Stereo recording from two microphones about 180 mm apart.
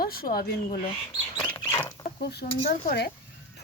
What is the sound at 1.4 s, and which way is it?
Rodents, 15° left (ahead or behind).